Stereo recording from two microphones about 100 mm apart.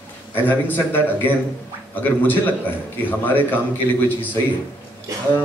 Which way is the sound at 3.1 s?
20° left (ahead or behind).